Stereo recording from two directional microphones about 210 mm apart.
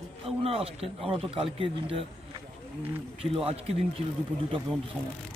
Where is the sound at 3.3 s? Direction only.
30° right (ahead or behind).